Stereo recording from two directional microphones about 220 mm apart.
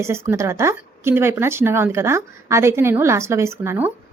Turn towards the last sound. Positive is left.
turn(degrees=-10)  # may be behind; listen again after turning